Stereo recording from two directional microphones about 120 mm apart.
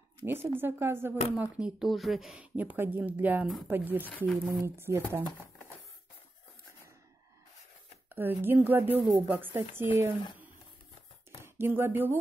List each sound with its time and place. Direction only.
0.2 s speech: 20° right (ahead or behind)
8.1 s speech: 15° right (ahead or behind)
11.4 s speech: 20° right (ahead or behind)